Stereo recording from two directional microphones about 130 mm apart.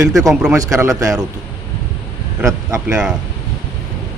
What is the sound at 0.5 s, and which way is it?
Speech, 25° right (ahead or behind).